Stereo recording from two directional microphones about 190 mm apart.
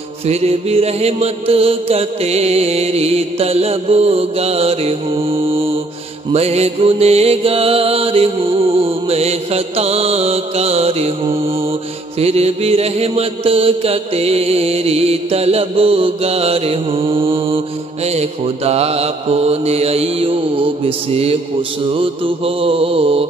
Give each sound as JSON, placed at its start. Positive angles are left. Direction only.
{"t": 0.3, "sound": "music", "side_deg": -35}
{"t": 21.9, "sound": "mantra", "side_deg": -30}